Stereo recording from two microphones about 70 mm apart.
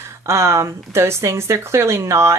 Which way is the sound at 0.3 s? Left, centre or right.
Right.